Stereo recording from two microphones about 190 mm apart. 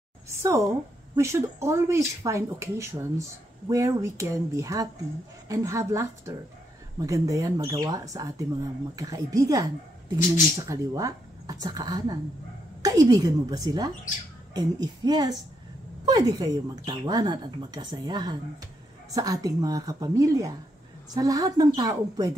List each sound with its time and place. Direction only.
0.4 s a woman's voice: 15° right (ahead or behind)